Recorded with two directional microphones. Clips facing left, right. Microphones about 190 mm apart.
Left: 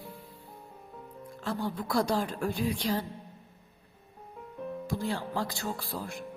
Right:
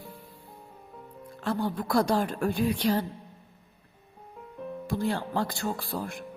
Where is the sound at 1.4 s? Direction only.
55° right (ahead or behind).